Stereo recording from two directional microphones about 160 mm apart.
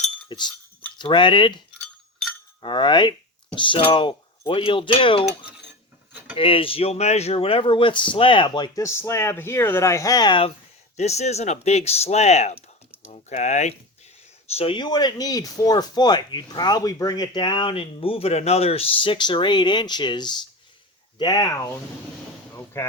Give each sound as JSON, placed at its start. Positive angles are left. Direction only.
{"t": 0.3, "sound": "speech", "side_deg": 30}
{"t": 2.6, "sound": "speech", "side_deg": 30}
{"t": 6.3, "sound": "speech", "side_deg": 35}
{"t": 10.9, "sound": "speech", "side_deg": 45}
{"t": 14.5, "sound": "speech", "side_deg": 35}
{"t": 22.5, "sound": "a sound", "side_deg": 15}